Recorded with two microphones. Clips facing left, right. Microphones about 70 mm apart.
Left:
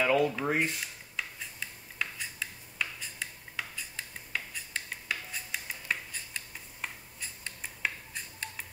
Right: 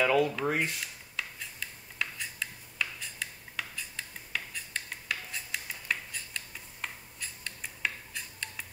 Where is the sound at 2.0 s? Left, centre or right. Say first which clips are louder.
Right 1 dB; centre.